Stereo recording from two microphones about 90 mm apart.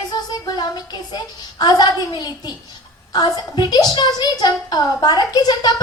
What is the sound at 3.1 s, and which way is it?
A woman's voice, 55° left (ahead or behind).